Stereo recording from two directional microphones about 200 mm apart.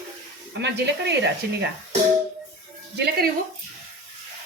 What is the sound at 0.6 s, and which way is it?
Speech, 60° right (ahead or behind).